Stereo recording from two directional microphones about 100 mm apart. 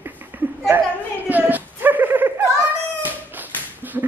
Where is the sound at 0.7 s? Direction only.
15° right (ahead or behind).